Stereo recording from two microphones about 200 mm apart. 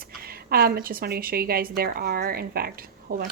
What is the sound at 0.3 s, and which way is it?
A woman's voice, 50° right (ahead or behind).